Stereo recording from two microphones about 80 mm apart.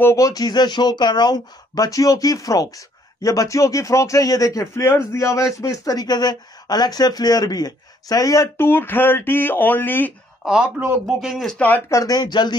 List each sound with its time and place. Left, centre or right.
0.0 s speech: left
8.5 s speech: left
11.1 s speech: centre
11.5 s speech: left
11.9 s speech: left